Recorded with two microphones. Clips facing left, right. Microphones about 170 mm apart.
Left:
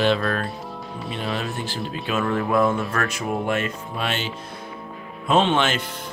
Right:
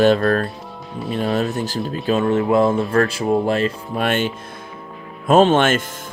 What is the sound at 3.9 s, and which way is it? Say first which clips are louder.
Speech: right 8 dB; 50° right (ahead or behind).